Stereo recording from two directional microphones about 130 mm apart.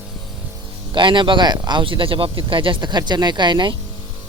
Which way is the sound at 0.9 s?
35° right (ahead or behind).